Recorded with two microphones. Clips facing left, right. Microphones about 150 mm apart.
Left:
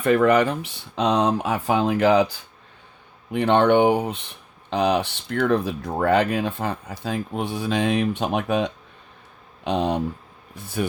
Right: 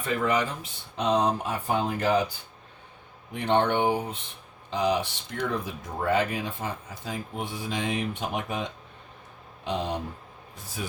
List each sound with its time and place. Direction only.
0.0 s speech: 60° left (ahead or behind); by 2.4 s 90° left
3.3 s speech: 75° left (ahead or behind)